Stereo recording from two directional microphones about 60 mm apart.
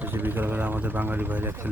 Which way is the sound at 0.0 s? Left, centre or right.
Right.